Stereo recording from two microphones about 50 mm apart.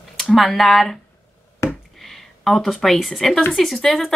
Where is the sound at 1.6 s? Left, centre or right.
Left.